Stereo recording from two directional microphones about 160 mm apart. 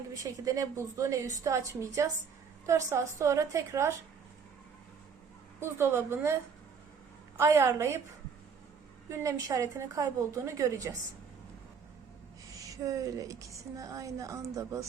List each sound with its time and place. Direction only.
0.1 s a woman's voice: 20° right (ahead or behind)
5.5 s a woman's voice: 15° right (ahead or behind)
7.3 s a woman's voice: 15° right (ahead or behind)
9.0 s a woman's voice: 20° right (ahead or behind)
12.5 s a woman's voice: 20° right (ahead or behind)